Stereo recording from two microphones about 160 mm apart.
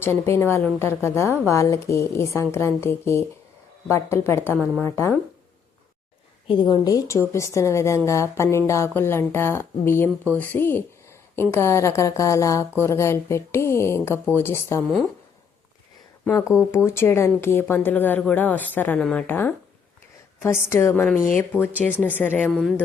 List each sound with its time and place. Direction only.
0.0 s a woman's voice: 15° left (ahead or behind)
4.5 s a woman's voice: 10° right (ahead or behind)
4.8 s a woman's voice: 15° left (ahead or behind)
6.5 s a woman's voice: 30° left (ahead or behind)
16.7 s a woman's voice: 15° left (ahead or behind)